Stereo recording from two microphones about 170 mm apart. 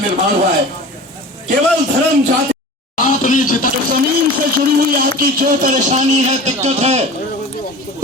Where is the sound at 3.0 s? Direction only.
50° left (ahead or behind).